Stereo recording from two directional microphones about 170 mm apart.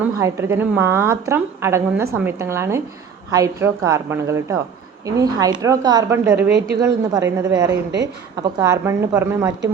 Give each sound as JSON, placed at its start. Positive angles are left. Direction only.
{"t": 0.0, "sound": "a woman's voice", "side_deg": -15}